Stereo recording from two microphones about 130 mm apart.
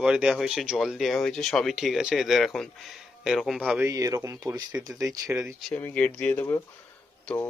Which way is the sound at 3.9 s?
25° right (ahead or behind).